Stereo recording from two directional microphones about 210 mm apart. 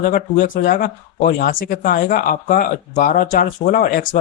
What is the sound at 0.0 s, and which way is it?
Speech, 40° left (ahead or behind).